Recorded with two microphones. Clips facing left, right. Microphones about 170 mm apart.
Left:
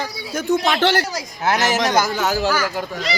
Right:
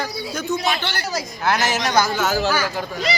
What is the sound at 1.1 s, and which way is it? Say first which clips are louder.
Speech: even; 15° left (ahead or behind).